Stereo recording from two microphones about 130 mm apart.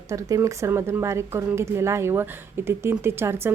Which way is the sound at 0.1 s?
25° right (ahead or behind).